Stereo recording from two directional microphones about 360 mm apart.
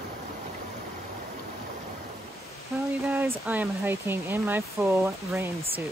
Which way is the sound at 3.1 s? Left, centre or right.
Centre.